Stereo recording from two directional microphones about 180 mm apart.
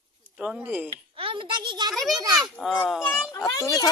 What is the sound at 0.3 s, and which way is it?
Speech, 5° right (ahead or behind).